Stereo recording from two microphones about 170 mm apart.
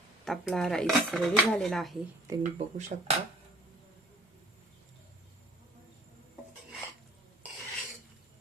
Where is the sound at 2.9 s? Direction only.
50° right (ahead or behind).